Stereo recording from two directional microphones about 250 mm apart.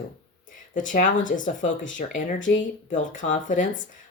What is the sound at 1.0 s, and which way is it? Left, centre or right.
Speech, left.